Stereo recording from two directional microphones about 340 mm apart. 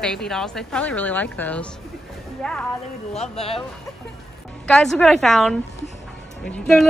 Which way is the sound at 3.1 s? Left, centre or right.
Centre.